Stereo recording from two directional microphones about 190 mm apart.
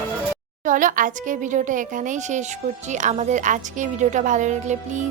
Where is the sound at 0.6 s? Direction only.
45° right (ahead or behind).